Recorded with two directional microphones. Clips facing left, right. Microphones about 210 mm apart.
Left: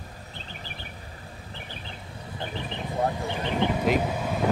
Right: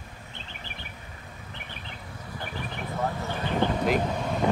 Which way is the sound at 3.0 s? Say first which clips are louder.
Left 3 dB; 15° left (ahead or behind).